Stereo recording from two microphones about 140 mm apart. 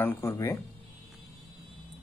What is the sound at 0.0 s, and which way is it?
Speech, 15° left (ahead or behind).